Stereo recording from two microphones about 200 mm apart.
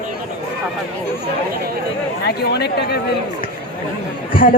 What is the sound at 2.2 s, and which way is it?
Speech, 55° left (ahead or behind).